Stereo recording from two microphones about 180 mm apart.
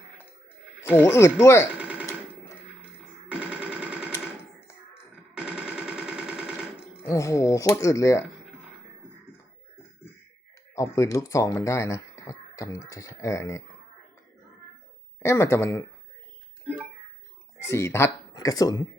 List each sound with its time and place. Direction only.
1.0 s speech: 15° left (ahead or behind)
1.8 s a sound: 10° right (ahead or behind)
3.2 s a sound: 5° right (ahead or behind)
5.3 s machine gun: 5° right (ahead or behind)
7.0 s speech: 15° left (ahead or behind)
10.8 s speech: 15° left (ahead or behind)
15.2 s speech: 15° left (ahead or behind)
17.6 s speech: 15° left (ahead or behind)